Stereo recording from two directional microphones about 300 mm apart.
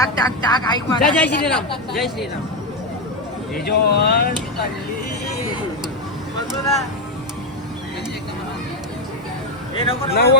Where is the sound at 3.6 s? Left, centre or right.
Left.